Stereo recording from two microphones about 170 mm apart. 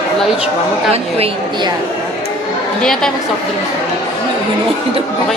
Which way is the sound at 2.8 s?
5° left (ahead or behind).